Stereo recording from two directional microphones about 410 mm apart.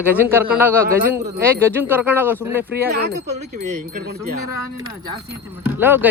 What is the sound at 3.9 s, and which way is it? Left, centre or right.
Speech, right.